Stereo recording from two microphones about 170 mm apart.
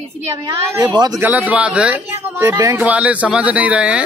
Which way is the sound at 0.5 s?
25° right (ahead or behind).